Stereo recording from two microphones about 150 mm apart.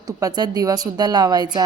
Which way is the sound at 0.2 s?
25° right (ahead or behind).